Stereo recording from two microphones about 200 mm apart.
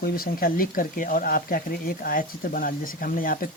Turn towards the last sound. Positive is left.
turn(degrees=45)  # may be behind; listen again after turning